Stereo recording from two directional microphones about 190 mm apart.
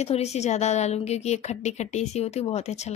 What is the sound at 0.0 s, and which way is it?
A woman's voice, 35° left (ahead or behind).